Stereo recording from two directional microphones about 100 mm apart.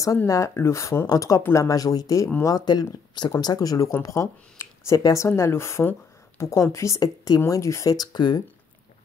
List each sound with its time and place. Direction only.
0.3 s speech: 30° left (ahead or behind); by 8.4 s 50° left (ahead or behind)